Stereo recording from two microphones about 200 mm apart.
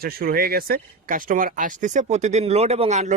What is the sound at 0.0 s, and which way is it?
Speech, 50° right (ahead or behind).